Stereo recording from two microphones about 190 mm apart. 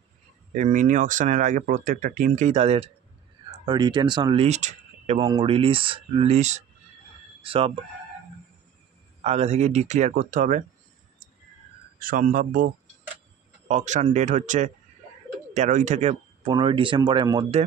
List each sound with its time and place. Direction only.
0.5 s speech: 40° right (ahead or behind)
3.6 s speech: 25° right (ahead or behind)
9.2 s speech: 35° right (ahead or behind)
12.0 s speech: 45° right (ahead or behind); by 17.5 s 25° right (ahead or behind)